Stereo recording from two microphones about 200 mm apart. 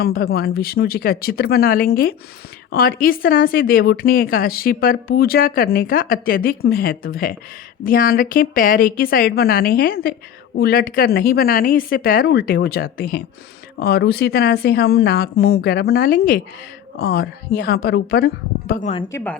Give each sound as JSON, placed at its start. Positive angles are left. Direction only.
{"t": 0.0, "sound": "speech", "side_deg": 50}
{"t": 19.0, "sound": "speech", "side_deg": 10}